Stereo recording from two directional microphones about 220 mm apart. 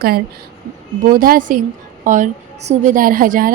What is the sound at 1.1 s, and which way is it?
A woman's voice, 40° right (ahead or behind).